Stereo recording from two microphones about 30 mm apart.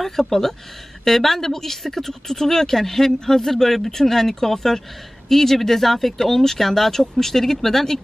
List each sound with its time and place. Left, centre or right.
0.0 s speech: centre